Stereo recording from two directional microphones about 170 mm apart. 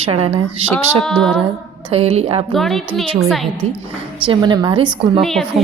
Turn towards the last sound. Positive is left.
turn(degrees=0)  # may be behind; listen again after turning